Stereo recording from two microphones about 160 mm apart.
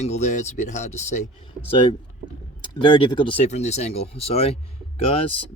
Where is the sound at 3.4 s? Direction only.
45° left (ahead or behind).